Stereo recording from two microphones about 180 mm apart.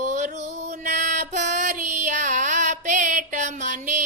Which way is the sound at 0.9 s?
45° right (ahead or behind).